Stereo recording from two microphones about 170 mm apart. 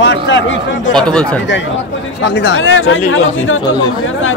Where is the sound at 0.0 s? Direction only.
90° left.